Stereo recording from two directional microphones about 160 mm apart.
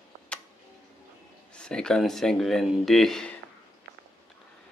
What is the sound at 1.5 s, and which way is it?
Speech, 5° left (ahead or behind).